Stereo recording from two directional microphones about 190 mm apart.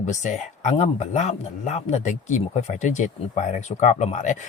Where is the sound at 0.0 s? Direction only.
40° left (ahead or behind).